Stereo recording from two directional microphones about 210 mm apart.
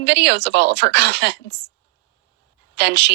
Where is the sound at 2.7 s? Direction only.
55° right (ahead or behind).